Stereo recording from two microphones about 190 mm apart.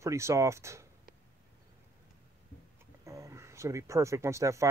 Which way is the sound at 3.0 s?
15° right (ahead or behind).